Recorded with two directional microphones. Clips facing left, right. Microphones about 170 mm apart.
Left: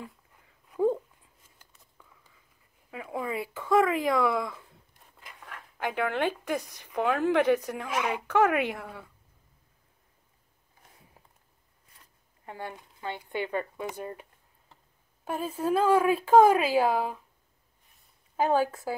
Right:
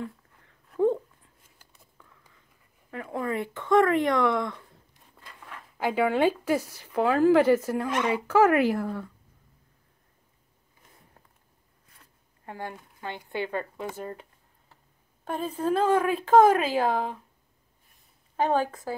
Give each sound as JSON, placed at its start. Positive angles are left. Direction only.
{"t": 0.0, "sound": "a sound", "side_deg": 5}
{"t": 2.9, "sound": "speech", "side_deg": 5}
{"t": 12.7, "sound": "speech", "side_deg": 15}
{"t": 15.2, "sound": "speech", "side_deg": 5}
{"t": 18.3, "sound": "speech", "side_deg": 10}